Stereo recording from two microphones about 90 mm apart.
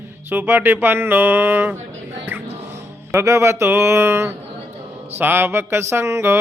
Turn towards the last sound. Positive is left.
turn(degrees=-30)  # may be behind; listen again after turning